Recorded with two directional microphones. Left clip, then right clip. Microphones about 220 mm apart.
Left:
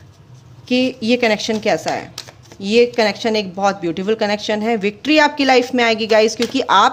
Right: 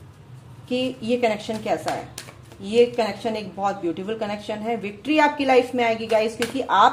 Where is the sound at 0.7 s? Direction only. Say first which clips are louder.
Left 7 dB; 40° left (ahead or behind).